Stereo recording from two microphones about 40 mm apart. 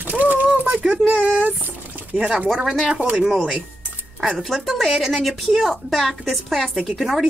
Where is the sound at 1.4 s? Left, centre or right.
Right.